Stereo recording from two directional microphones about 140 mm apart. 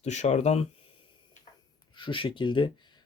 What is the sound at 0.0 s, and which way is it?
Speech, 55° left (ahead or behind).